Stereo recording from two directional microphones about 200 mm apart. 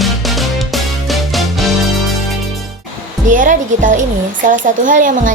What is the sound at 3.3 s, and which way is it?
A child's voice, 40° right (ahead or behind).